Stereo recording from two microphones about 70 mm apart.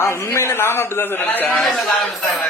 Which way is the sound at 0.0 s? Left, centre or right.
Left.